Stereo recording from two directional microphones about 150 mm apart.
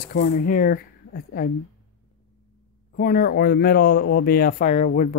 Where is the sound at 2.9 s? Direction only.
70° left (ahead or behind).